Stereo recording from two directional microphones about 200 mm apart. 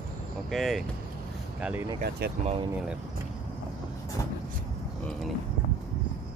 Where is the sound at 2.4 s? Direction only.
30° right (ahead or behind).